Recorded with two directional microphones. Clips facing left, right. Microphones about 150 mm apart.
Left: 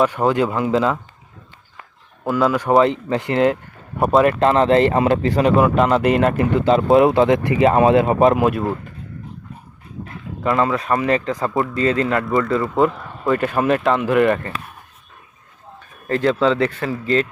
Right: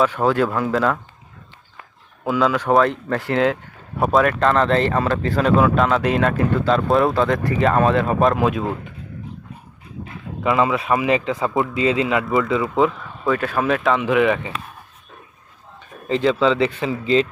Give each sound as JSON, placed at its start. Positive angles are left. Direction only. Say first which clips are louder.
{"t": 0.0, "sound": "speech", "louder": "left 1 dB", "side_deg": 10}
{"t": 2.2, "sound": "speech", "louder": "left 1 dB", "side_deg": 0}
{"t": 3.1, "sound": "speech", "louder": "left 2 dB", "side_deg": 15}
{"t": 8.4, "sound": "speech", "louder": "left 2 dB", "side_deg": 0}
{"t": 10.4, "sound": "speech", "louder": "even", "side_deg": -5}
{"t": 16.0, "sound": "speech", "louder": "even", "side_deg": -15}